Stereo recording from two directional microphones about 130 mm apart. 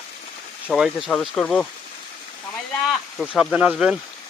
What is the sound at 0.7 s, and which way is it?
Speech, 5° right (ahead or behind).